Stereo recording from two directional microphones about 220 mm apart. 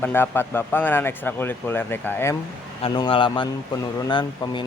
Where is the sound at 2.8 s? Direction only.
20° left (ahead or behind).